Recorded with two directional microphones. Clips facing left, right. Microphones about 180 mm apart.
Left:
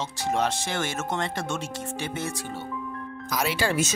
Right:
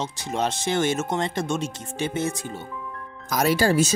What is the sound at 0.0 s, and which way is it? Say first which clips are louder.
Speech: even; 20° right (ahead or behind).